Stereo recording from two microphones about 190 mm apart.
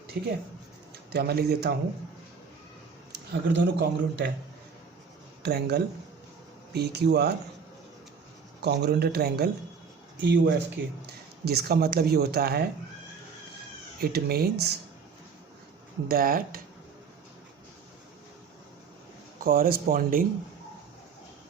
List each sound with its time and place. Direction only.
0.1 s speech: 55° right (ahead or behind)
3.1 s a man's voice: 60° right (ahead or behind)
5.4 s speech: 55° right (ahead or behind)
8.6 s speech: 60° right (ahead or behind)
10.2 s speech: 65° right (ahead or behind)
14.0 s speech: 55° right (ahead or behind)
16.0 s speech: 50° right (ahead or behind)
19.4 s speech: 50° right (ahead or behind)